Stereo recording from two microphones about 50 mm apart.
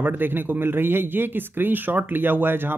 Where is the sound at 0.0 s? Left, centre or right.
Right.